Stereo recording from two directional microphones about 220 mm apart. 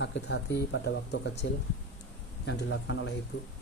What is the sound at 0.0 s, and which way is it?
Speech, 50° left (ahead or behind).